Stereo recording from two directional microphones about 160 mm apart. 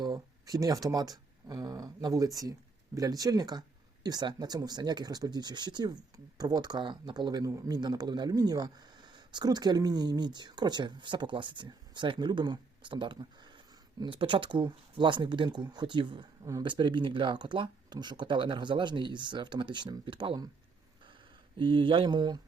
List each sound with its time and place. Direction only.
0.0 s speech: 25° right (ahead or behind)
21.6 s speech: 30° right (ahead or behind)